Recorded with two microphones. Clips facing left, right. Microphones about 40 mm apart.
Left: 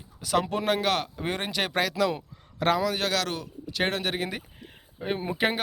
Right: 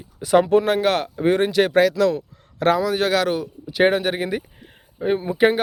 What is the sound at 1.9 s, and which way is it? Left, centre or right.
Speech, centre.